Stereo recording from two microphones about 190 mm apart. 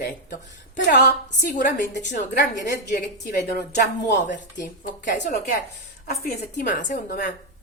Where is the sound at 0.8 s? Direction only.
65° left (ahead or behind).